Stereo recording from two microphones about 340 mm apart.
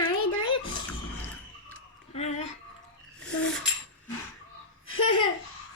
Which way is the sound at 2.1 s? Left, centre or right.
Centre.